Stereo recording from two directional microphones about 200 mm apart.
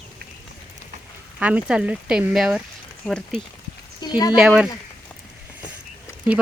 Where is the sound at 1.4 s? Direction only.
5° right (ahead or behind).